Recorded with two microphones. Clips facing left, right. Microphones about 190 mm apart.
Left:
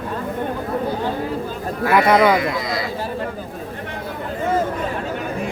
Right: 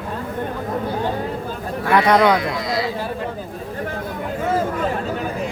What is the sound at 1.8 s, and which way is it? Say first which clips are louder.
Speech: even; 5° left (ahead or behind).